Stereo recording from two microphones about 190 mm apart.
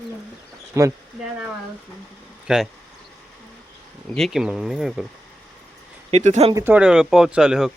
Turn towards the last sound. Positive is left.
turn(degrees=-5)  # may be behind; listen again after turning